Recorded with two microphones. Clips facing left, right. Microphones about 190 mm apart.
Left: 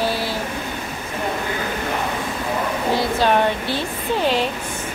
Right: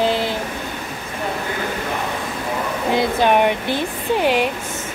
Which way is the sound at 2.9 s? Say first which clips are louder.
Right 3 dB; 15° right (ahead or behind).